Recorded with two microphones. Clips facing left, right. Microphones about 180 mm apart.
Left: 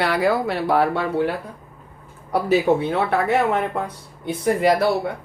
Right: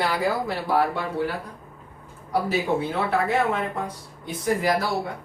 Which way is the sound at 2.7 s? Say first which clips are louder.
Left 6 dB; 45° left (ahead or behind).